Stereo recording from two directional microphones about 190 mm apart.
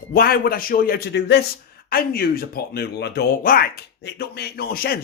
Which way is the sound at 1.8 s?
50° left (ahead or behind).